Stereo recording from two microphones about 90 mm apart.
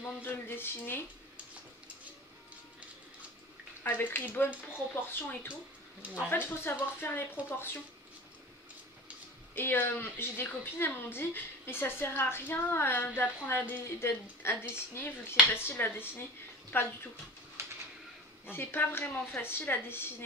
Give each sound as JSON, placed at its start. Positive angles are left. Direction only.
{"t": 0.0, "sound": "a woman's voice", "side_deg": 20}
{"t": 3.8, "sound": "a woman's voice", "side_deg": 20}
{"t": 9.6, "sound": "a woman's voice", "side_deg": 25}
{"t": 18.5, "sound": "a woman's voice", "side_deg": 25}